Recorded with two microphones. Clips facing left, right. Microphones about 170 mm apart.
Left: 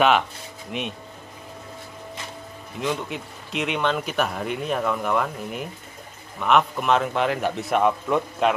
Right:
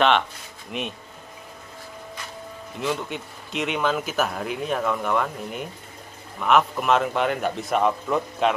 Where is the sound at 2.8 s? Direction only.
Centre (ahead or behind).